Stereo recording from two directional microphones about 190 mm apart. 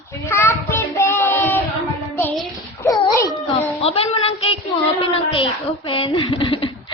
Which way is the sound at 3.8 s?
30° left (ahead or behind).